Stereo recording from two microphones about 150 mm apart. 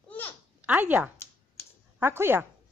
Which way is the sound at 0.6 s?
10° right (ahead or behind).